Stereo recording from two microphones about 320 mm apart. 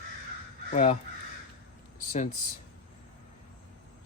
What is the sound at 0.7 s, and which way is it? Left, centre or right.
Speech, left.